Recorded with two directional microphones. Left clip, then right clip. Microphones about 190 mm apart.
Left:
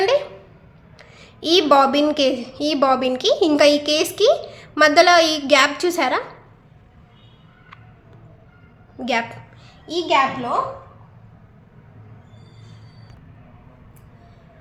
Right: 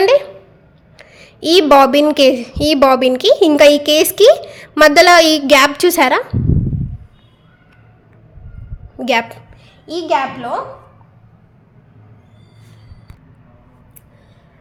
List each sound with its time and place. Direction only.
0.9 s a woman's voice: 35° right (ahead or behind)
9.0 s a woman's voice: 35° right (ahead or behind)